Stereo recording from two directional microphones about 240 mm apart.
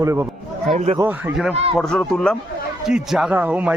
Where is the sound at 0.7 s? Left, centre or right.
Right.